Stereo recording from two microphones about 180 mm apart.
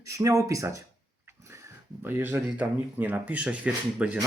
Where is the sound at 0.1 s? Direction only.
15° right (ahead or behind).